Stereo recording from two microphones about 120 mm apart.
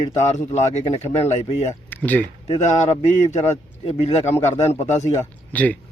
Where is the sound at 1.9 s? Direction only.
15° left (ahead or behind).